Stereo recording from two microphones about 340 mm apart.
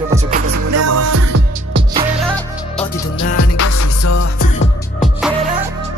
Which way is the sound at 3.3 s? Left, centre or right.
Left.